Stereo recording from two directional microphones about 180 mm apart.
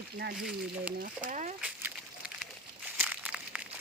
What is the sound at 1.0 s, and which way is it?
Speech, 45° right (ahead or behind).